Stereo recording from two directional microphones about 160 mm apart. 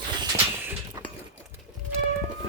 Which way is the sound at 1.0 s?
25° right (ahead or behind).